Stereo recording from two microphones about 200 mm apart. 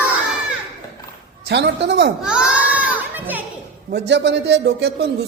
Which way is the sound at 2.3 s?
5° right (ahead or behind).